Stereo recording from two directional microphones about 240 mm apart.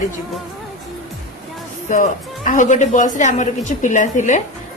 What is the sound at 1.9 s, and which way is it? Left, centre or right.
A woman's voice, left.